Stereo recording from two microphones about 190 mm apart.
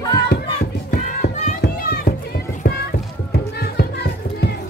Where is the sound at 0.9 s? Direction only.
50° left (ahead or behind).